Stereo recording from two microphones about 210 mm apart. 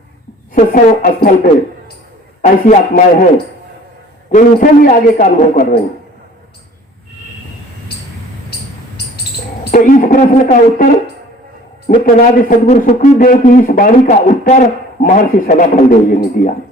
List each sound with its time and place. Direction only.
0.5 s a man's voice: 40° left (ahead or behind)
2.4 s a man's voice: 35° left (ahead or behind)
4.3 s a man's voice: 35° left (ahead or behind)
9.7 s a man's voice: 40° left (ahead or behind)
11.9 s a man's voice: 40° left (ahead or behind)